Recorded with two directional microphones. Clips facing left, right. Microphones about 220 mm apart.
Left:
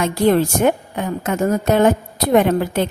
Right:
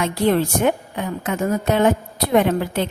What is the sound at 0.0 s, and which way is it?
Speech, 45° left (ahead or behind).